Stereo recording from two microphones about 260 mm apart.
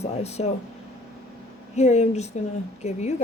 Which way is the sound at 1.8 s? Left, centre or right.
Left.